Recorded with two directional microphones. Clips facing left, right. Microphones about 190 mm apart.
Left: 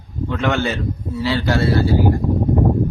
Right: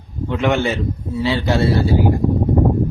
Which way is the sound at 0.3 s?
20° right (ahead or behind).